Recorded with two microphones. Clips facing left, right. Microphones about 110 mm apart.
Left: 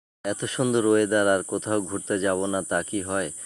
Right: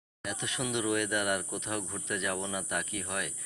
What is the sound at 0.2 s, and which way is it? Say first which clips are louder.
Speech: left 10 dB; 45° left (ahead or behind).